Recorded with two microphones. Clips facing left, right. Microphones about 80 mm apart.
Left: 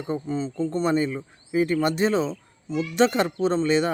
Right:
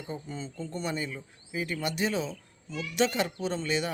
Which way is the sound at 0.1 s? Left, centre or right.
Left.